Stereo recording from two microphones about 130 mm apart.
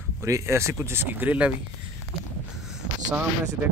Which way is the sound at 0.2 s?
20° right (ahead or behind).